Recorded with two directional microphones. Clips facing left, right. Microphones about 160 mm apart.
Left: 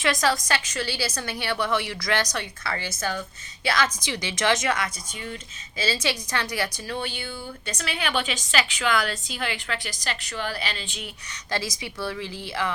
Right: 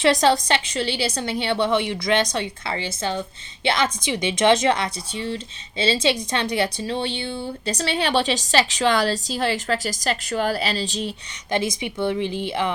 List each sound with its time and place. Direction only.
0.0 s a woman's voice: 30° right (ahead or behind)
11.5 s a woman's voice: 25° right (ahead or behind)